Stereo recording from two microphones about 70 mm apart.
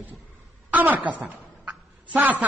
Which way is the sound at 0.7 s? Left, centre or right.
Right.